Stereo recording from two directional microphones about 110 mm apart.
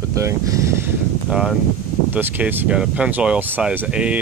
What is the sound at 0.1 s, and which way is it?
Speech, 30° right (ahead or behind).